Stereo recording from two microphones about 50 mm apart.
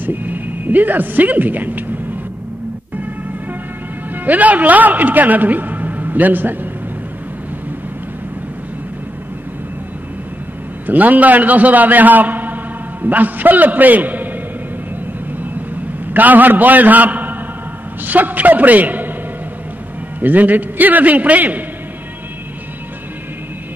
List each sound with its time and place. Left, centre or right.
0.0 s a woman's voice: right
4.1 s a man's voice: right
10.9 s a man's voice: right
16.1 s a man's voice: right
20.2 s a man's voice: right